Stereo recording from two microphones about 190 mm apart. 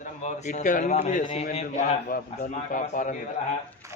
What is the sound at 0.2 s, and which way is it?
A man's voice, 40° left (ahead or behind).